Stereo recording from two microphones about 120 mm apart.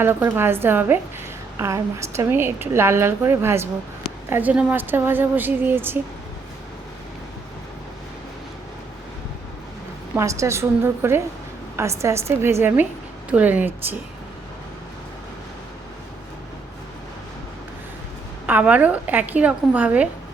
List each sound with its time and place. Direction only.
0.0 s a woman's voice: 20° right (ahead or behind)
10.2 s a woman's voice: 25° right (ahead or behind)
18.4 s a woman's voice: 15° right (ahead or behind)